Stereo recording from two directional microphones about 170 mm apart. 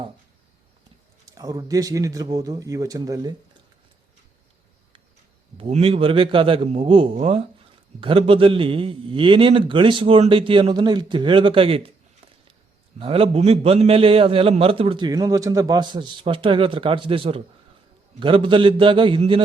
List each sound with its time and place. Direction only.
1.2 s a man's voice: 20° right (ahead or behind)
5.5 s a man's voice: 35° right (ahead or behind)
13.0 s a man's voice: 35° right (ahead or behind)